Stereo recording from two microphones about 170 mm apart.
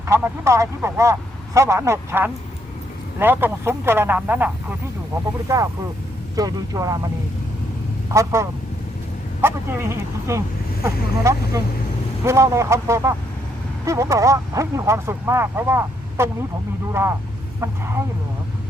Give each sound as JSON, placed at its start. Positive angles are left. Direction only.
{"t": 0.0, "sound": "speech", "side_deg": -15}
{"t": 5.1, "sound": "speech", "side_deg": -20}
{"t": 8.1, "sound": "speech", "side_deg": -15}